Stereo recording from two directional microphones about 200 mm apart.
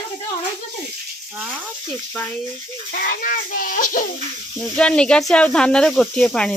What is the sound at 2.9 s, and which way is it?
Speech, 45° left (ahead or behind).